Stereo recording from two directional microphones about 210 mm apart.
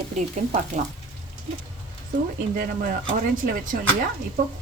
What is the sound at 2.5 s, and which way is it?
Frying, 40° right (ahead or behind).